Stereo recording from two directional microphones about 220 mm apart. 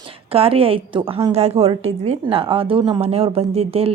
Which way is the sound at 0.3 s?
25° right (ahead or behind).